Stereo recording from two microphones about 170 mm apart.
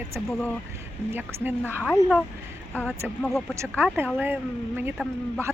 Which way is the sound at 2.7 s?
10° left (ahead or behind).